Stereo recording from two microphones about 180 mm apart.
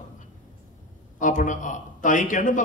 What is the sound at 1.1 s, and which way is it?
A man's voice, 45° left (ahead or behind).